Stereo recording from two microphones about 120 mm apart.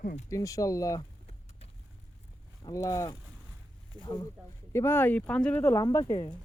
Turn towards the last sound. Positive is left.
turn(degrees=30)  # may be behind; listen again after turning